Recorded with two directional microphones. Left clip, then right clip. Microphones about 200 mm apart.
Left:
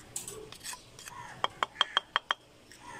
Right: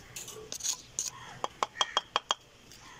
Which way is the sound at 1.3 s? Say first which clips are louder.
Left 1 dB; 10° right (ahead or behind).